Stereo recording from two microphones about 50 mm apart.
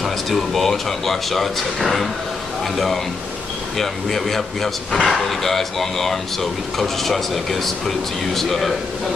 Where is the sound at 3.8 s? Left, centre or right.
Centre.